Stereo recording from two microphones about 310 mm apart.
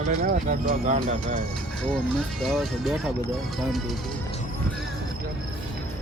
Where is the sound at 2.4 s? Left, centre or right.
Centre.